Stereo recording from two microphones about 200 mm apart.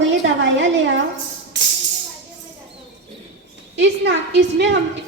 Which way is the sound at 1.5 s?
65° right (ahead or behind).